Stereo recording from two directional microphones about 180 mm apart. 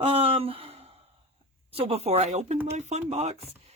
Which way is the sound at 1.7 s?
35° right (ahead or behind).